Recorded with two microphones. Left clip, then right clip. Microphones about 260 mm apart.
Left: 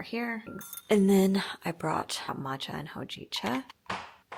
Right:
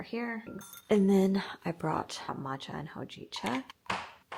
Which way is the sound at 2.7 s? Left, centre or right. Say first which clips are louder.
Left 2 dB; left.